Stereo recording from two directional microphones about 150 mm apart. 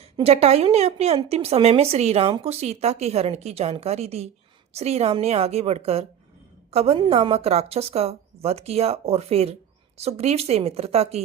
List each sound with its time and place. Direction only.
0.0 s a woman's voice: 45° right (ahead or behind)